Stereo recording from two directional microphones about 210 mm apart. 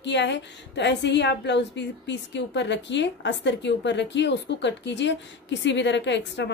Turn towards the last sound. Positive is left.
turn(degrees=55)  # may be behind; listen again after turning